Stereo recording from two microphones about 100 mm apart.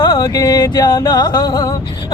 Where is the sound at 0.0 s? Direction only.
45° left (ahead or behind).